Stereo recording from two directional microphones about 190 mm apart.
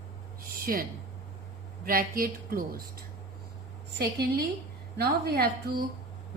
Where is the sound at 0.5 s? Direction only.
50° right (ahead or behind).